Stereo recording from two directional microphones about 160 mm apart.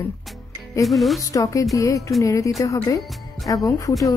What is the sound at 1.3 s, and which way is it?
Speech, 20° left (ahead or behind).